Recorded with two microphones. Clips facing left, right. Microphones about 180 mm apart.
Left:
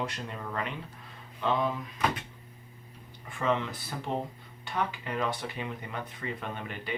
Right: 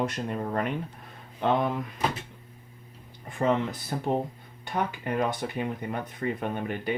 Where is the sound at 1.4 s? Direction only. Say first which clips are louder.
Right 4 dB; 55° right (ahead or behind).